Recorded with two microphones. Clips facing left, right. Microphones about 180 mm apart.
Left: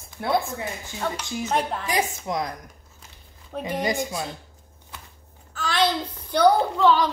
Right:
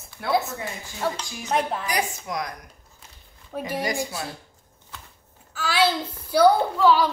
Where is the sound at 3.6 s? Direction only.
20° left (ahead or behind).